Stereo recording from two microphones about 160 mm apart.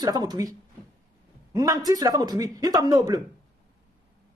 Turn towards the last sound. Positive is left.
turn(degrees=-20)  # may be behind; listen again after turning